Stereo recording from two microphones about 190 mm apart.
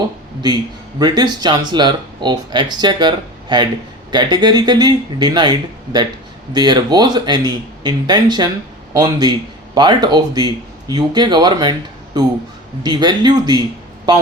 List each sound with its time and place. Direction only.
0.4 s speech: 20° right (ahead or behind)